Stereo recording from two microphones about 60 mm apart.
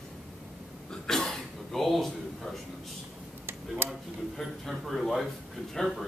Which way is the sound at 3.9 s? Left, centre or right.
Centre.